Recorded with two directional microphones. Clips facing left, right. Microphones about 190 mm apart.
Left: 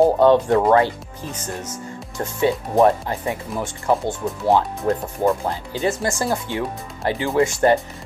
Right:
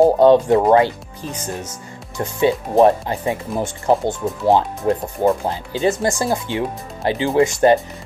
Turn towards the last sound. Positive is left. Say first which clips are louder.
# right 3 dB
turn(degrees=-20)  # may be behind; listen again after turning